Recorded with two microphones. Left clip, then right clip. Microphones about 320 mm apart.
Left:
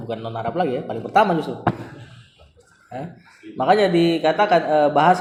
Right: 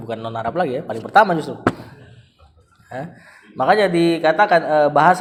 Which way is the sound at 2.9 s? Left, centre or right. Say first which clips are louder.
Right 2 dB; right.